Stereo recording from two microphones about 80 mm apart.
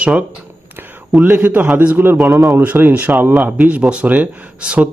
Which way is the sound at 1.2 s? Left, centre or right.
Centre.